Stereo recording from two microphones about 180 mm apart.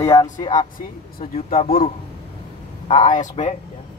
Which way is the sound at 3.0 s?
45° left (ahead or behind).